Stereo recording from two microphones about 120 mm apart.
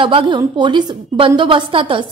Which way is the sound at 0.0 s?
45° right (ahead or behind).